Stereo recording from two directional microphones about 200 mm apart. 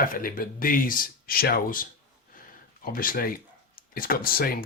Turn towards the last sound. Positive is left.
turn(degrees=50)  # may be behind; listen again after turning